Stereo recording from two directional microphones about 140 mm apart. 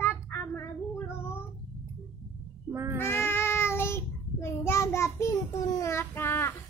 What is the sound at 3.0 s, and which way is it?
Child singing, 15° left (ahead or behind).